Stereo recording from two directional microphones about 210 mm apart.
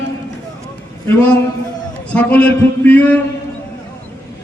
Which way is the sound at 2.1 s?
5° left (ahead or behind).